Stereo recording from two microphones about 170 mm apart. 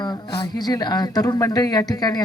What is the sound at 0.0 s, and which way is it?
Speech, 25° left (ahead or behind).